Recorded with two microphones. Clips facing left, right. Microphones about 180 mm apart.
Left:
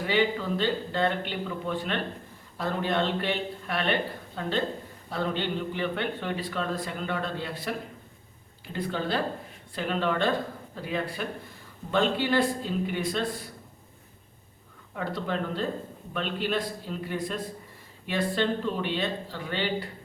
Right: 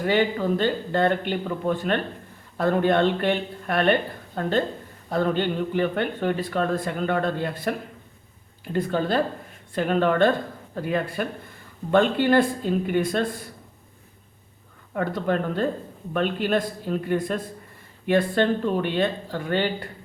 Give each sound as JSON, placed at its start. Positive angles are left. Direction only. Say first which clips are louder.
{"t": 0.0, "sound": "speech", "louder": "right 4 dB", "side_deg": -50}
{"t": 14.9, "sound": "speech", "louder": "right 6 dB", "side_deg": -50}